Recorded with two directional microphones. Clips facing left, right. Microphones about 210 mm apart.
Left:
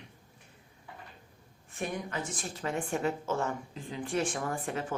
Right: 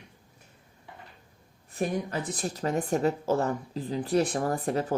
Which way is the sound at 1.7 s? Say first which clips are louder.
Right 6 dB; 35° right (ahead or behind).